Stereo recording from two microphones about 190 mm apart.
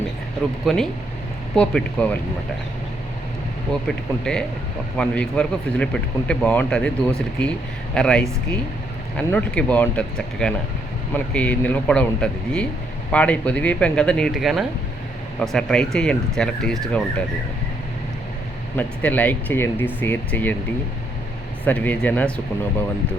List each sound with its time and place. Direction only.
0.6 s a man's voice: centre (ahead or behind)
3.7 s a man's voice: 5° left (ahead or behind)
7.9 s a man's voice: 5° left (ahead or behind)
18.8 s speech: 10° left (ahead or behind)
21.6 s speech: 10° left (ahead or behind)